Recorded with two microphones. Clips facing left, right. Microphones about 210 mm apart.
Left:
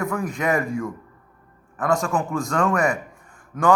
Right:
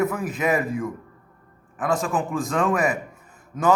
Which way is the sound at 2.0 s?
20° right (ahead or behind).